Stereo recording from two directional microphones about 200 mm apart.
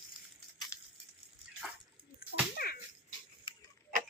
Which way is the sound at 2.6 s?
50° left (ahead or behind).